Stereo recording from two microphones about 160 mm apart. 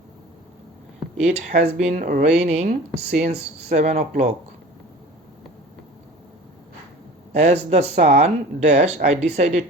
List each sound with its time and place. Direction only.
1.2 s speech: 45° right (ahead or behind)
7.3 s speech: 45° right (ahead or behind)